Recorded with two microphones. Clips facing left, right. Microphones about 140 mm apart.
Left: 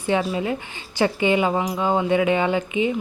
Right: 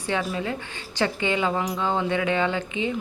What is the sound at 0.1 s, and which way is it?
Speech, 20° left (ahead or behind).